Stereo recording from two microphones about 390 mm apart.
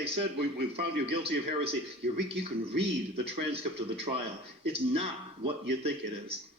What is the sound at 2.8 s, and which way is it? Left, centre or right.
A man's voice, centre.